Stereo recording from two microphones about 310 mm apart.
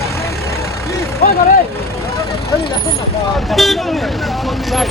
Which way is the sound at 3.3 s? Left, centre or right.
Centre.